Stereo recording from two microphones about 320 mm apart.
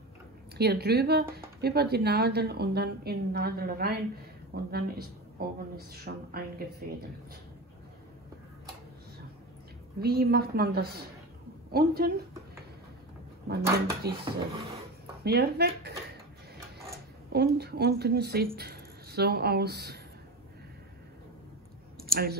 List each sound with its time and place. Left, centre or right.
0.6 s speech: right
9.9 s speech: right
13.5 s speech: right
15.2 s speech: right
17.3 s a woman's voice: right
22.0 s speech: right